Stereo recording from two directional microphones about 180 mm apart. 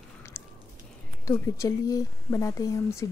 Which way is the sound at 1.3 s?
20° left (ahead or behind).